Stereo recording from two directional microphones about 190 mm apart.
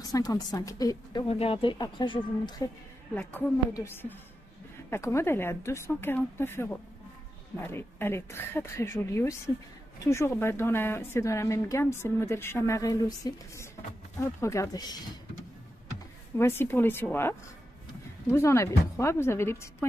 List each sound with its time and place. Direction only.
0.0 s speech: 20° left (ahead or behind)
1.3 s speech: 30° left (ahead or behind)
3.2 s a woman's voice: 10° left (ahead or behind)
16.3 s a woman's voice: 15° left (ahead or behind)